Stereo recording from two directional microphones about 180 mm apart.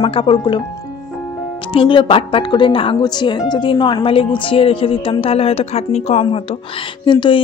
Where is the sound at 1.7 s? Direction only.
30° left (ahead or behind).